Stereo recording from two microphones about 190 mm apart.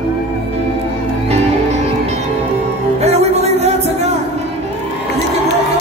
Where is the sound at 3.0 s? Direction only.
35° right (ahead or behind).